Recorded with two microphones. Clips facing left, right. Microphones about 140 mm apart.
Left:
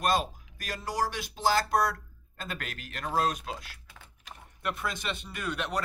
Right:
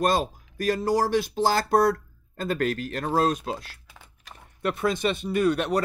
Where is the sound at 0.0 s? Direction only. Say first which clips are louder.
Right 4 dB; 35° right (ahead or behind).